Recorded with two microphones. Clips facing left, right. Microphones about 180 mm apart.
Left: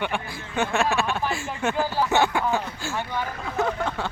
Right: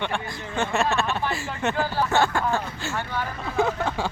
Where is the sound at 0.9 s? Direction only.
10° left (ahead or behind).